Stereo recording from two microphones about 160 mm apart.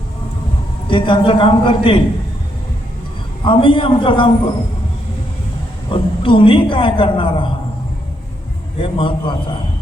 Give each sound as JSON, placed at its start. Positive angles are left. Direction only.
{"t": 0.9, "sound": "a woman's voice", "side_deg": 30}
{"t": 3.4, "sound": "a woman's voice", "side_deg": 30}
{"t": 5.9, "sound": "a woman's voice", "side_deg": 30}
{"t": 8.8, "sound": "a woman's voice", "side_deg": 35}